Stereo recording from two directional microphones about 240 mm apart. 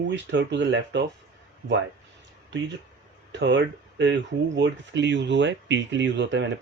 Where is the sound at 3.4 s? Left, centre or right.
Right.